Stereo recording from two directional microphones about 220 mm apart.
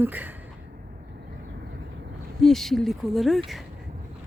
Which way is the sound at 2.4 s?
Centre (ahead or behind).